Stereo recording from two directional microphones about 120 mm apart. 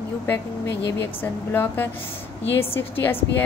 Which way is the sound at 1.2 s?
15° left (ahead or behind).